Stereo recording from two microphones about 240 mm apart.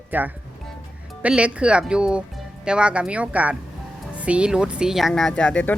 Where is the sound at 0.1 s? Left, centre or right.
Centre.